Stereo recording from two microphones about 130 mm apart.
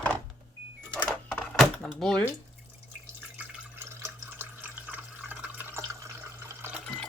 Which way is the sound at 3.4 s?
15° right (ahead or behind).